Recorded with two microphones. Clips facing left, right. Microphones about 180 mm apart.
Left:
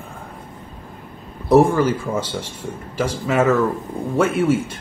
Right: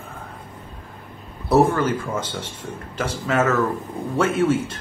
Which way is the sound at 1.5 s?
10° left (ahead or behind).